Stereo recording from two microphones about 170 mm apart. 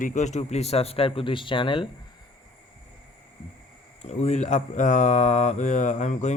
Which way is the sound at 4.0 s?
40° left (ahead or behind).